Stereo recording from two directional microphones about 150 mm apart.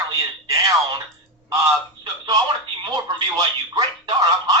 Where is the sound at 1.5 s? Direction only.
25° right (ahead or behind).